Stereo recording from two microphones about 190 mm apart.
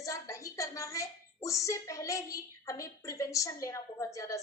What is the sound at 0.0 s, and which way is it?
Speech, 15° left (ahead or behind).